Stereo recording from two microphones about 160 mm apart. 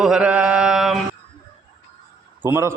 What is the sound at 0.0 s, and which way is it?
Mantra, 5° right (ahead or behind).